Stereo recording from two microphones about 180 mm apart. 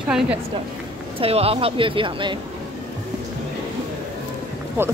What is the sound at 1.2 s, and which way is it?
Speech, 35° right (ahead or behind).